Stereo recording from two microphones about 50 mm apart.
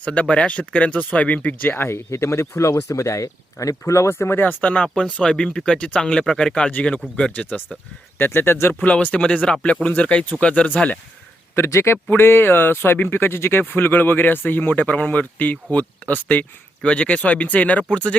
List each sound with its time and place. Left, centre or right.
0.0 s speech: left
1.8 s speech: left
4.1 s speech: left
4.6 s speech: left
8.2 s speech: left
8.8 s speech: left
9.2 s speech: left
11.5 s speech: left
12.1 s speech: left